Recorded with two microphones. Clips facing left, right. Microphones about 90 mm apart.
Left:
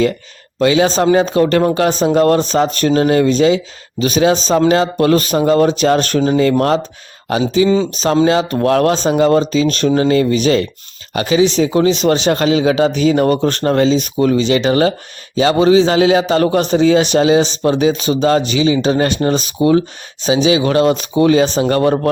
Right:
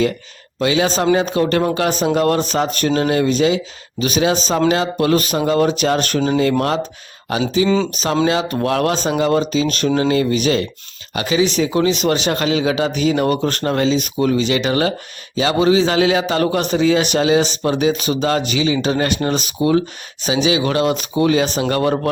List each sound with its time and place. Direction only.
0.6 s speech: 35° left (ahead or behind)
7.9 s a man's voice: 35° left (ahead or behind)